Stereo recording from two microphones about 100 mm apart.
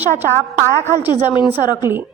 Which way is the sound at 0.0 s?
20° right (ahead or behind).